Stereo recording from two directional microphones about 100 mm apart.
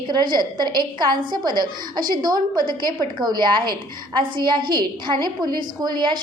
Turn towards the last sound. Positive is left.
turn(degrees=-50)  # may be behind; listen again after turning